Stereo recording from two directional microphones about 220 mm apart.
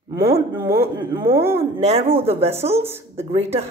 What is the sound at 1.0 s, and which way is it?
Speech, 20° right (ahead or behind).